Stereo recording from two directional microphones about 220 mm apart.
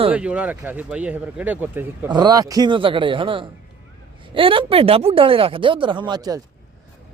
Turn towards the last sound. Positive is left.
turn(degrees=-20)  # may be behind; listen again after turning